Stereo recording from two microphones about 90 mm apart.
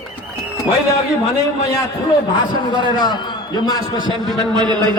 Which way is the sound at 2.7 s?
55° left (ahead or behind).